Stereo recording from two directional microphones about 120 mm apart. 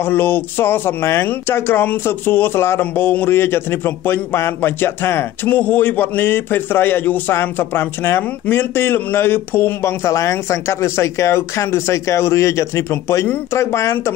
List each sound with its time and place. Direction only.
0.0 s speech: 15° left (ahead or behind)